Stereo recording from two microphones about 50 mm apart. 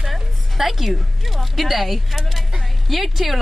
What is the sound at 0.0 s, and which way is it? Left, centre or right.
A woman's voice, centre.